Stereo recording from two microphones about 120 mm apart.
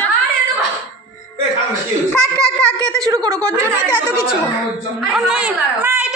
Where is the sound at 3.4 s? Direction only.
10° left (ahead or behind).